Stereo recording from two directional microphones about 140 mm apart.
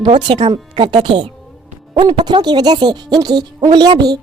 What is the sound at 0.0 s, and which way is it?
A woman's voice, 35° right (ahead or behind).